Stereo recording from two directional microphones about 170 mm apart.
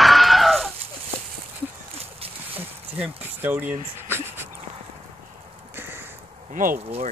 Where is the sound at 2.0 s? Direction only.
35° right (ahead or behind).